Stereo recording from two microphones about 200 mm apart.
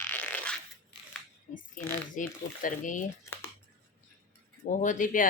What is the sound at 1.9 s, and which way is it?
Speech, 40° left (ahead or behind).